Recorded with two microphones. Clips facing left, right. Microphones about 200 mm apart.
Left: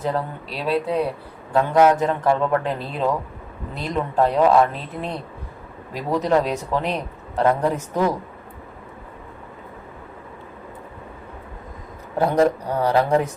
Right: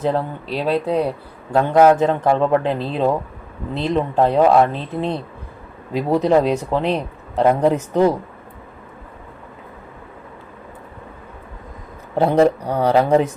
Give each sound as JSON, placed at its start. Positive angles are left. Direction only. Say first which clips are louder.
{"t": 0.0, "sound": "speech", "louder": "right 4 dB", "side_deg": -25}
{"t": 2.5, "sound": "speech", "louder": "right 4 dB", "side_deg": -20}
{"t": 12.1, "sound": "speech", "louder": "right 3 dB", "side_deg": -25}